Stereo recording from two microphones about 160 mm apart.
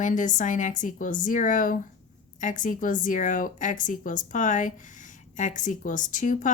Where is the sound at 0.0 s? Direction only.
55° left (ahead or behind).